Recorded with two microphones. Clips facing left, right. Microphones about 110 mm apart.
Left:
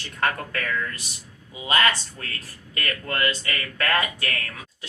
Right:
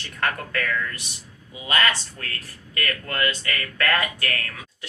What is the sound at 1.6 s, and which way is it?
Speech, 25° left (ahead or behind).